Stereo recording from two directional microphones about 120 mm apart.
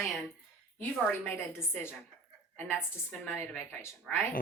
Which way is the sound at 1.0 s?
20° left (ahead or behind).